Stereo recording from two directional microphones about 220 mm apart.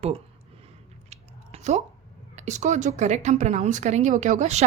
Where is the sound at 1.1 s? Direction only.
30° right (ahead or behind).